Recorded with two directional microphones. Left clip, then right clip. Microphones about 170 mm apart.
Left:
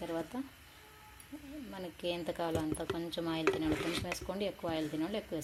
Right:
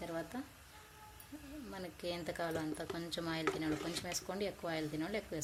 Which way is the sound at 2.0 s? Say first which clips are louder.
Left 4 dB; centre (ahead or behind).